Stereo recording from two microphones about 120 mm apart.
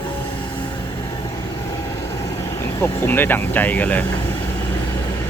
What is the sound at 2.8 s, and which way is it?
Speech, 20° left (ahead or behind).